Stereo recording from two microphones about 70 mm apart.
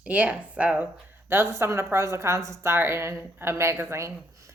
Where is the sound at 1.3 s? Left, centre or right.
Right.